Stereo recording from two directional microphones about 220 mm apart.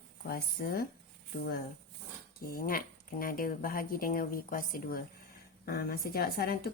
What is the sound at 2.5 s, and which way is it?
Speech, 40° left (ahead or behind).